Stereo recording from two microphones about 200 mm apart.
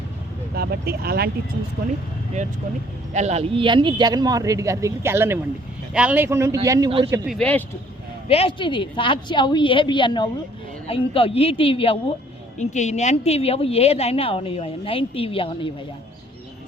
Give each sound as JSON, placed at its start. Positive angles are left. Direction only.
{"t": 0.5, "sound": "speech", "side_deg": -50}
{"t": 2.4, "sound": "a man's voice", "side_deg": -35}
{"t": 7.3, "sound": "speech", "side_deg": 5}
{"t": 8.3, "sound": "a woman's voice", "side_deg": 30}